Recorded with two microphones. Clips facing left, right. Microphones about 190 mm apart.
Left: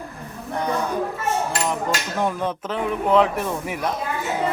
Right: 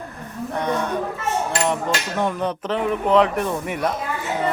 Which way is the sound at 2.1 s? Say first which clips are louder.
Right 1 dB; centre (ahead or behind).